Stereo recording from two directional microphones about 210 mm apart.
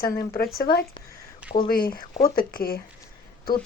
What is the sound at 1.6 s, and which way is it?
Speech, 45° left (ahead or behind).